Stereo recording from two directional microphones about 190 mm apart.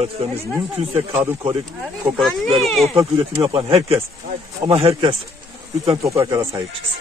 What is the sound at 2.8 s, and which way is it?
A man's voice, 30° right (ahead or behind).